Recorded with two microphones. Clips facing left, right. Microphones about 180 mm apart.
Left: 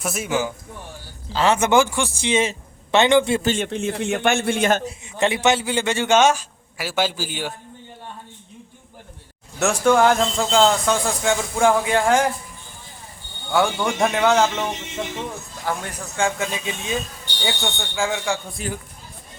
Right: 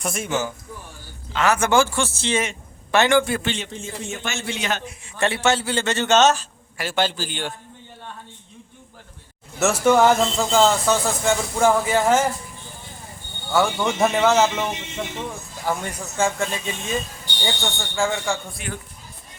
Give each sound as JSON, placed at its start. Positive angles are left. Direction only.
{"t": 0.0, "sound": "a man's voice", "side_deg": 5}
{"t": 1.3, "sound": "a man's voice", "side_deg": 30}
{"t": 2.4, "sound": "a man's voice", "side_deg": 25}
{"t": 3.4, "sound": "a man's voice", "side_deg": 45}
{"t": 3.7, "sound": "a man's voice", "side_deg": 65}
{"t": 4.9, "sound": "a man's voice", "side_deg": 20}
{"t": 9.6, "sound": "speech", "side_deg": -5}
{"t": 13.5, "sound": "speech", "side_deg": 0}